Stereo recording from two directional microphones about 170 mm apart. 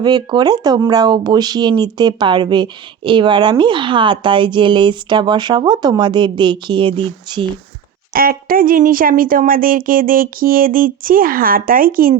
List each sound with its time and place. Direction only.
0.0 s speech: 25° right (ahead or behind)
8.1 s speech: 60° right (ahead or behind)